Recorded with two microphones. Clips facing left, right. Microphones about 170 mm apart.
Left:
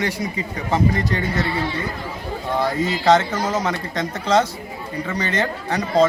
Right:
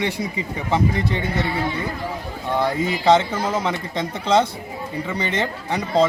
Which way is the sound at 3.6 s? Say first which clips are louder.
Even; 25° right (ahead or behind).